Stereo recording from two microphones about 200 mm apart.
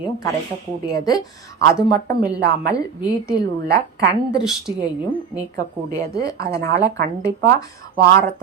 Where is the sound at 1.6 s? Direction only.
50° right (ahead or behind).